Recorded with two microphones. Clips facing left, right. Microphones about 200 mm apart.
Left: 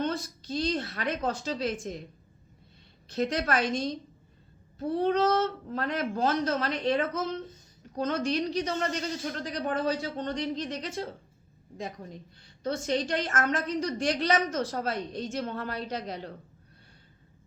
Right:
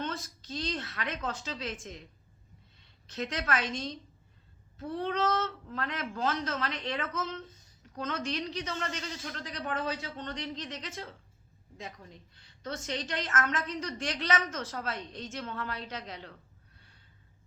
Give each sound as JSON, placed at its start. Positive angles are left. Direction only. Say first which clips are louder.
{"t": 0.0, "sound": "a sound", "louder": "left 6 dB", "side_deg": 35}
{"t": 0.5, "sound": "a woman's voice", "louder": "left 6 dB", "side_deg": 30}
{"t": 3.1, "sound": "a woman's voice", "louder": "left 5 dB", "side_deg": 35}
{"t": 3.6, "sound": "a woman's voice", "louder": "left 7 dB", "side_deg": 15}
{"t": 4.8, "sound": "a woman's voice", "louder": "left 6 dB", "side_deg": 35}